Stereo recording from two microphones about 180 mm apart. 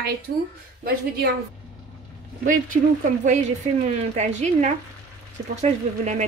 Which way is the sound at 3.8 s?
40° right (ahead or behind).